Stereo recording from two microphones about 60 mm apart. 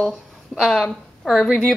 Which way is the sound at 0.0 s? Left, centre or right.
Centre.